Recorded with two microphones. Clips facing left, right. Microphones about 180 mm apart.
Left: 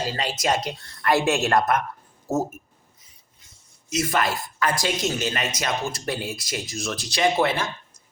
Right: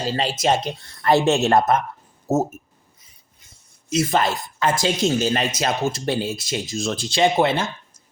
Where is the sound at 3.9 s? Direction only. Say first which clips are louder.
Right 4 dB; 30° right (ahead or behind).